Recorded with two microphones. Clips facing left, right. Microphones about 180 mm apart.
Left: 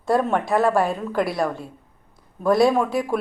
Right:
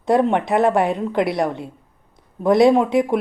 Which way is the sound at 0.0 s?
20° right (ahead or behind).